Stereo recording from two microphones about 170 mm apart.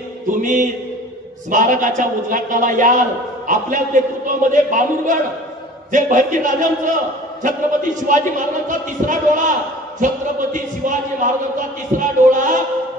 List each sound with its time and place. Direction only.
0.3 s a man's voice: 50° right (ahead or behind)
12.0 s a man's voice: 50° right (ahead or behind)